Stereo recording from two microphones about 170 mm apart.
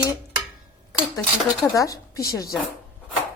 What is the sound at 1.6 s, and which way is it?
Speech, 20° left (ahead or behind).